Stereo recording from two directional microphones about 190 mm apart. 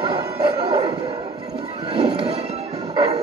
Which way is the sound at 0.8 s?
35° right (ahead or behind).